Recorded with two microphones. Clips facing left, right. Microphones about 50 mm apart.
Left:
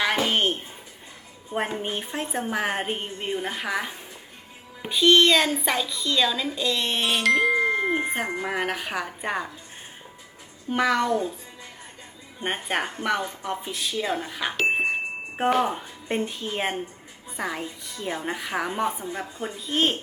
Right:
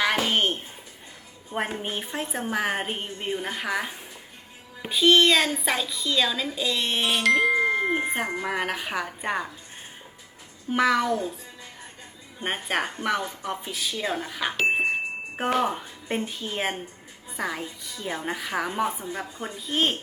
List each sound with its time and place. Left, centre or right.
0.0 s a sound: centre
1.5 s a woman's voice: centre
10.7 s a woman's voice: centre
12.4 s a woman's voice: centre